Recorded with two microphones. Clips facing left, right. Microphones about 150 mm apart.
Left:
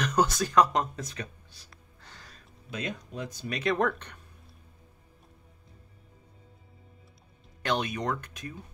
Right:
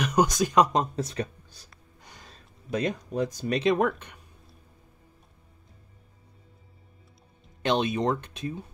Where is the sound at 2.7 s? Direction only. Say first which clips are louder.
Right 8 dB; 45° right (ahead or behind).